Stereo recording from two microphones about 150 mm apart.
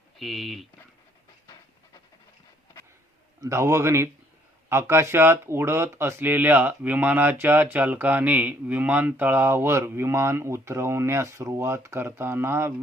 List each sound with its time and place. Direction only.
0.2 s speech: centre (ahead or behind)
3.4 s a man's voice: 20° right (ahead or behind)